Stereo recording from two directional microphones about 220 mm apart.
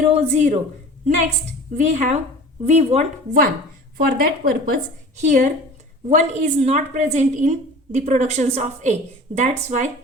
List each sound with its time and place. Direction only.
0.0 s speech: 30° right (ahead or behind)
1.7 s a woman's voice: 35° right (ahead or behind)